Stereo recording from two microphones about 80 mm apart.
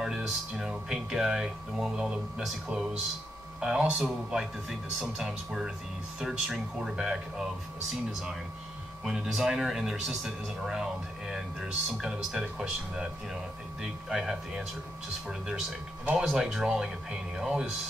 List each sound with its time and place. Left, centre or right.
0.0 s speech: centre
9.0 s speech: centre
16.2 s speech: centre